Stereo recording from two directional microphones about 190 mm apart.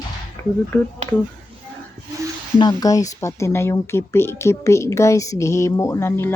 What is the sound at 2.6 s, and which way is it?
A woman's voice, 20° left (ahead or behind).